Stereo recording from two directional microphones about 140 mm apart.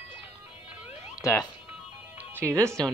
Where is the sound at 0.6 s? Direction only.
10° right (ahead or behind).